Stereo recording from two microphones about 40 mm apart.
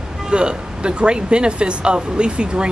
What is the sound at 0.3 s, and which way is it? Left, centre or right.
Speech, right.